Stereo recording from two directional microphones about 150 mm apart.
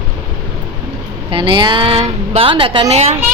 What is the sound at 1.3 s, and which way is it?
A woman's voice, 35° right (ahead or behind).